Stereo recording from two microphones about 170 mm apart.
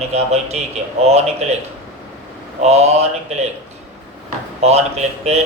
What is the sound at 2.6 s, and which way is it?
Speech, 40° right (ahead or behind).